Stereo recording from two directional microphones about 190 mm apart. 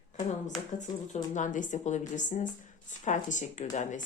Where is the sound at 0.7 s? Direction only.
40° left (ahead or behind).